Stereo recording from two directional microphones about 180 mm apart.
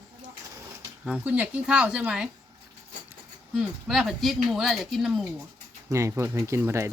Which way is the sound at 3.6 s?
Centre (ahead or behind).